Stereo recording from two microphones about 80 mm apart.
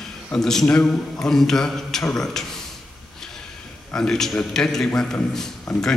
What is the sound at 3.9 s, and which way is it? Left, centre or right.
A man's voice, centre.